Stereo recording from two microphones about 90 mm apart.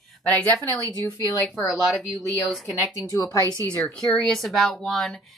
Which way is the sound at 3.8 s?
5° left (ahead or behind).